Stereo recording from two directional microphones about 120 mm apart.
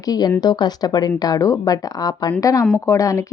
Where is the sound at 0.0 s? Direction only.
30° left (ahead or behind).